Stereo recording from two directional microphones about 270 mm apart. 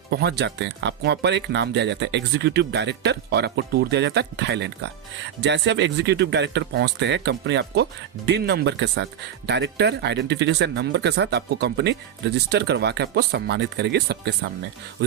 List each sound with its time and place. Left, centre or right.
0.1 s speech: right